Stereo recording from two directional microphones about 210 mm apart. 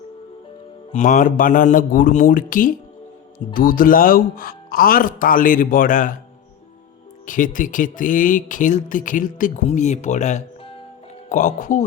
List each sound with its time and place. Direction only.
0.9 s speech: 35° left (ahead or behind)
7.3 s speech: 40° left (ahead or behind)